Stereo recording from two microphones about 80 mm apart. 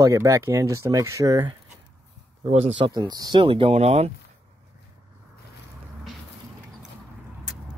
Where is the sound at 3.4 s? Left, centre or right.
Right.